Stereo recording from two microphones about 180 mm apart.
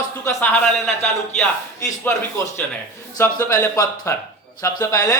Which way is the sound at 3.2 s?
15° left (ahead or behind).